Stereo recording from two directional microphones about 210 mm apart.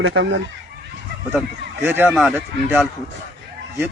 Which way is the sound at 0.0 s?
60° right (ahead or behind).